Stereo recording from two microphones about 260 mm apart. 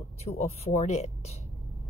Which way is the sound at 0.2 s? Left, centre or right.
Left.